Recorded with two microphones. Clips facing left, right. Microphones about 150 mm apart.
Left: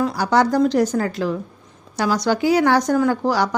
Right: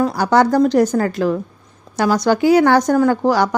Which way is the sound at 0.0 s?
50° right (ahead or behind).